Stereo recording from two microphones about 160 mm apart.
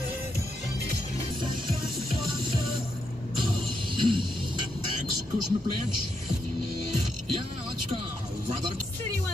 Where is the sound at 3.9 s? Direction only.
30° right (ahead or behind).